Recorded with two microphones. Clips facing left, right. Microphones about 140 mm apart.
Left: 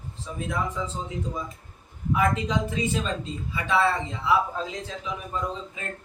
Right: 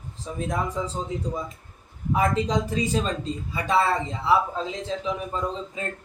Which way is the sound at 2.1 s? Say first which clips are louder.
Right 2 dB; 35° right (ahead or behind).